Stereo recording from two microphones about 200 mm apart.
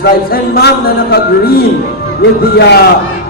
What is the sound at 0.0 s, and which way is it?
Speech, 50° left (ahead or behind).